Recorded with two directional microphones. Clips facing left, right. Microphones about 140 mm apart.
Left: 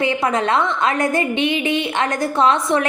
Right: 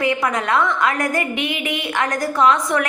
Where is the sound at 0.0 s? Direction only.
25° left (ahead or behind).